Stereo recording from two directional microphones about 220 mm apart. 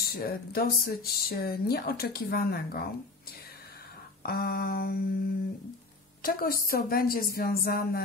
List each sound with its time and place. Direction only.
0.0 s speech: 45° left (ahead or behind)
4.2 s speech: 45° left (ahead or behind)
6.2 s speech: 40° left (ahead or behind)